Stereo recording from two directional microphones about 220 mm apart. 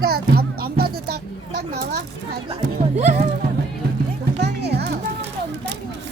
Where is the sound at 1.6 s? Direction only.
45° right (ahead or behind).